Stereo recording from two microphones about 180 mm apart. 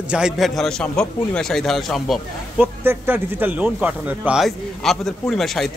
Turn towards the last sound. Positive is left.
turn(degrees=0)  # may be behind; listen again after turning